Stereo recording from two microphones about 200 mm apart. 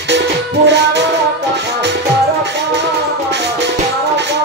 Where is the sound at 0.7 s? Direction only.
60° right (ahead or behind).